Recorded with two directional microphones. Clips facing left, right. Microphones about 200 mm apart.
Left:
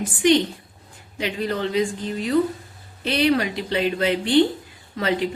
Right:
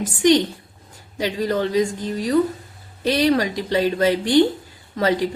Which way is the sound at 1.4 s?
40° right (ahead or behind).